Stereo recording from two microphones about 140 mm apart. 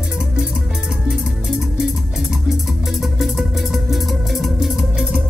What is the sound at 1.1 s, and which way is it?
Music, 5° right (ahead or behind).